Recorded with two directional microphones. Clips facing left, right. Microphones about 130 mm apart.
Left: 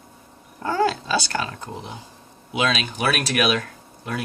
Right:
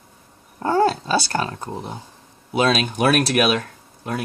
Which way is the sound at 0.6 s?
35° right (ahead or behind).